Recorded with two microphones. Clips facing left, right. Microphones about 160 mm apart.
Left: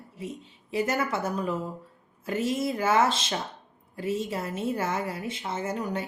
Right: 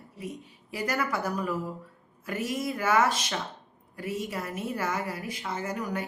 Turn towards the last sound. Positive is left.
turn(degrees=25)  # may be behind; listen again after turning